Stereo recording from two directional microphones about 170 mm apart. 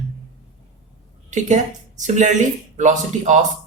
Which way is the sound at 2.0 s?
45° right (ahead or behind).